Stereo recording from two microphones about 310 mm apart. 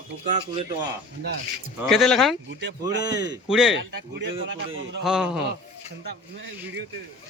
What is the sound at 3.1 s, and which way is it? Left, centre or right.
Speech, centre.